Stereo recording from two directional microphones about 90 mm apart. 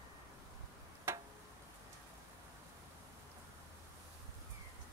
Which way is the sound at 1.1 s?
25° right (ahead or behind).